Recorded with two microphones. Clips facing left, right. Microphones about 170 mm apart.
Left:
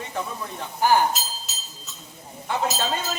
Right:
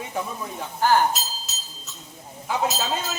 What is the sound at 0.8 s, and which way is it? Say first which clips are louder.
Speech: even; 15° left (ahead or behind).